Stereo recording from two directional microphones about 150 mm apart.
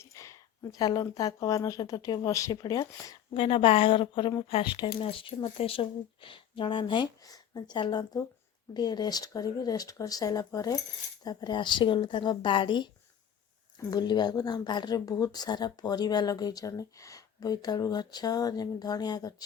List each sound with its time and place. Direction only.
0.0 s speech: 20° left (ahead or behind)
3.3 s speech: 35° left (ahead or behind)